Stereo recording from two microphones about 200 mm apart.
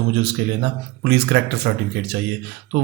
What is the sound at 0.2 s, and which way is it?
Speech, 55° right (ahead or behind).